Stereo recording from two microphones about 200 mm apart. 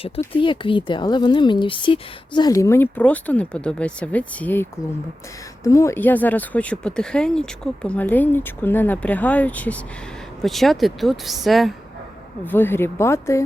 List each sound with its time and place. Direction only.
0.3 s speech: 25° left (ahead or behind)